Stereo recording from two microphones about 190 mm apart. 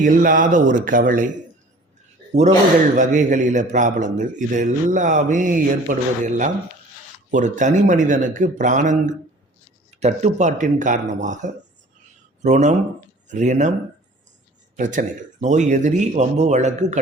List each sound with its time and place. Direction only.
0.0 s speech: 45° right (ahead or behind)
2.9 s a man's voice: 40° right (ahead or behind)
14.8 s a man's voice: 40° right (ahead or behind)